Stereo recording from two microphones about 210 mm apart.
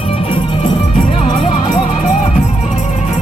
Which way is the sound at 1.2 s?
40° left (ahead or behind).